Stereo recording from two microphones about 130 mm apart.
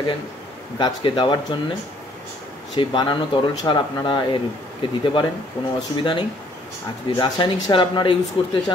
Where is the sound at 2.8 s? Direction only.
35° left (ahead or behind).